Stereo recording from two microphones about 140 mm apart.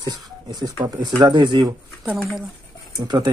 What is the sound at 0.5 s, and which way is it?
Speech, 30° right (ahead or behind).